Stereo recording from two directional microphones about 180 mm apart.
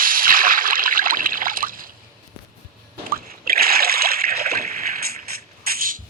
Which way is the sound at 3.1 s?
55° right (ahead or behind).